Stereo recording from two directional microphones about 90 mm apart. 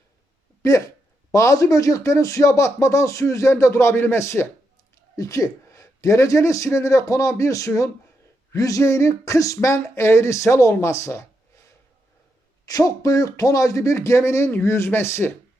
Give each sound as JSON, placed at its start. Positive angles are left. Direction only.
{"t": 0.6, "sound": "speech", "side_deg": 40}
{"t": 12.6, "sound": "speech", "side_deg": 45}